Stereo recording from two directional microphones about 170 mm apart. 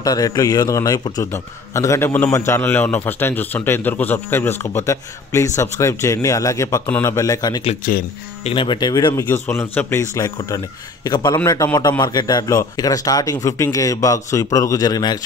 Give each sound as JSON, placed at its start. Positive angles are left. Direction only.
{"t": 0.0, "sound": "a man's voice", "side_deg": 20}
{"t": 7.8, "sound": "speech", "side_deg": 55}
{"t": 8.5, "sound": "a man's voice", "side_deg": 30}